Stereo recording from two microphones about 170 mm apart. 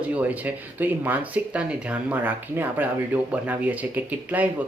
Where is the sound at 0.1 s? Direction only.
10° right (ahead or behind).